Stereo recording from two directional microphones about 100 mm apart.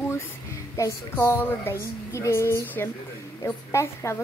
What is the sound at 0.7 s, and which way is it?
A woman's voice, 30° left (ahead or behind).